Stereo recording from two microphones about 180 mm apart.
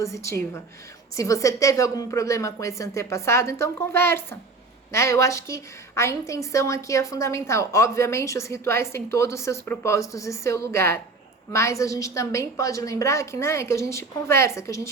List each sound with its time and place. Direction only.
0.0 s a woman's voice: 15° left (ahead or behind)